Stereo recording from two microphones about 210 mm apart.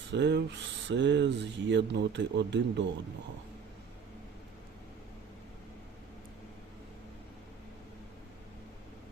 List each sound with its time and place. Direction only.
0.1 s speech: 55° right (ahead or behind)